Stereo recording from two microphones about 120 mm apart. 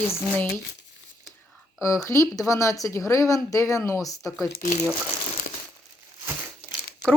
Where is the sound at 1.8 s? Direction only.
25° left (ahead or behind).